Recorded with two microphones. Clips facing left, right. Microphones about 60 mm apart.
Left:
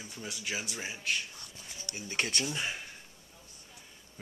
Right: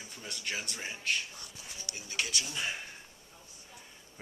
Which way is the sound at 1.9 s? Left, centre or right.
Left.